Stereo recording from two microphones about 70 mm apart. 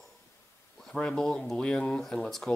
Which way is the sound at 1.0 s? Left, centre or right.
Centre.